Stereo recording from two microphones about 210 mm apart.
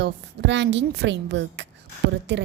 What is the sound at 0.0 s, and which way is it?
A woman's voice, 55° right (ahead or behind).